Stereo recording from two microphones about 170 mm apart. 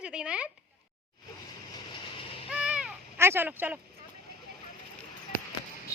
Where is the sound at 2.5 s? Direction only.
5° right (ahead or behind).